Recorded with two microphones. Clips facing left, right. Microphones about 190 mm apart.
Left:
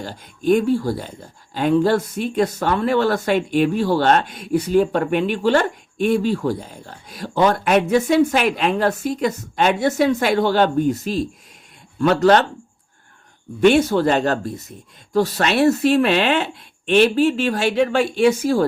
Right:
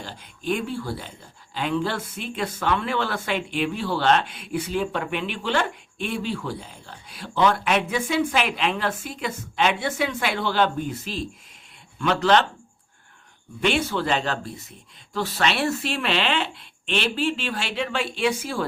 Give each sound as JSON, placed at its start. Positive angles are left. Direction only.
{"t": 0.0, "sound": "speech", "side_deg": 45}
{"t": 13.6, "sound": "speech", "side_deg": 45}